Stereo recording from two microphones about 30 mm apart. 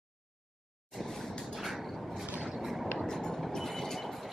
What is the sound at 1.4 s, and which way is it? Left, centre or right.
Vehicle, centre.